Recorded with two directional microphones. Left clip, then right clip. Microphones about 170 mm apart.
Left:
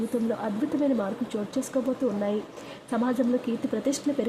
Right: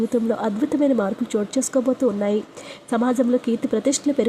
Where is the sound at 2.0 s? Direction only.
30° right (ahead or behind).